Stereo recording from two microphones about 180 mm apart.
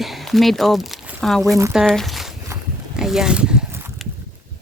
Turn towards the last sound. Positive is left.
turn(degrees=-5)  # may be behind; listen again after turning